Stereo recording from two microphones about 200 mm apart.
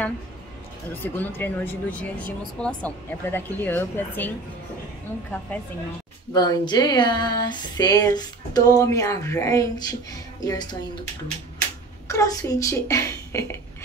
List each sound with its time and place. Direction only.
1.0 s speech: 10° left (ahead or behind)
6.3 s speech: 20° left (ahead or behind)
12.1 s speech: 15° left (ahead or behind)